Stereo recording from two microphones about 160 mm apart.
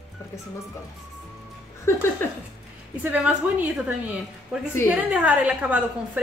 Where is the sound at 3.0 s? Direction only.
10° right (ahead or behind).